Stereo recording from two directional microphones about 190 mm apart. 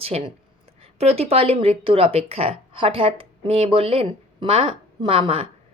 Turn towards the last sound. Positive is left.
turn(degrees=-30)  # may be behind; listen again after turning